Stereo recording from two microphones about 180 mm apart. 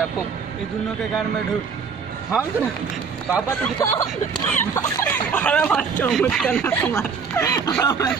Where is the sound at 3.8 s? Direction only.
15° left (ahead or behind).